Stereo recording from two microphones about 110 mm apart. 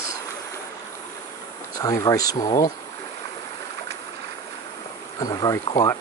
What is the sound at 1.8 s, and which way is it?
Speech, 30° left (ahead or behind).